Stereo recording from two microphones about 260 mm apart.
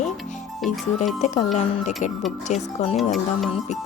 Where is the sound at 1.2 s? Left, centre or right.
Left.